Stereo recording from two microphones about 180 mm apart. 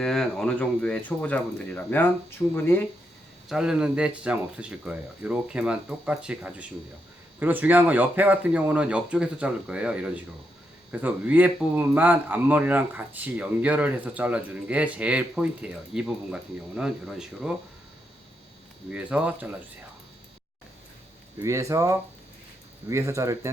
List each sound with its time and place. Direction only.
0.0 s speech: 5° left (ahead or behind)
3.5 s speech: 5° right (ahead or behind)
18.9 s speech: 5° right (ahead or behind)
21.3 s speech: 15° right (ahead or behind)